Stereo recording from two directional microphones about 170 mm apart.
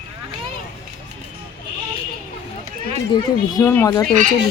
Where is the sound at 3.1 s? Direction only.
25° left (ahead or behind).